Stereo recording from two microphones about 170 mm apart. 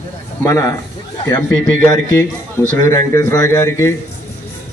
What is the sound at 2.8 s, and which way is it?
A man's voice, 15° left (ahead or behind).